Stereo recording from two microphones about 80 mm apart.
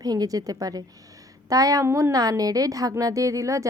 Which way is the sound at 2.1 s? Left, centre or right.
Right.